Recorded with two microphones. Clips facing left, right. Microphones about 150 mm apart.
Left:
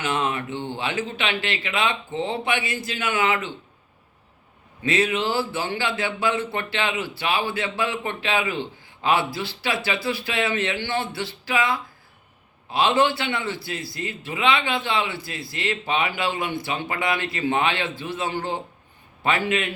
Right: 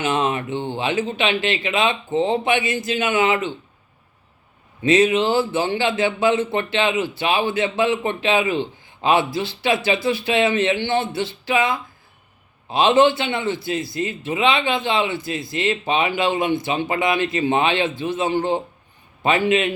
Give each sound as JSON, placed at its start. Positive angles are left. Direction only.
{"t": 0.0, "sound": "a man's voice", "side_deg": -20}
{"t": 4.8, "sound": "a man's voice", "side_deg": -20}